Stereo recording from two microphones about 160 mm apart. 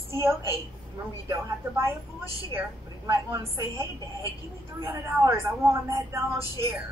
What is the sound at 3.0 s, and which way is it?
Speech, 25° right (ahead or behind).